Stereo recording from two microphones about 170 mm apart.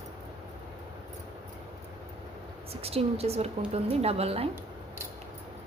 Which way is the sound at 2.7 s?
35° right (ahead or behind).